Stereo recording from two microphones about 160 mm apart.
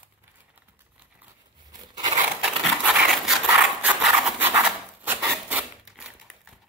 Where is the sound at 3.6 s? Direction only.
10° right (ahead or behind).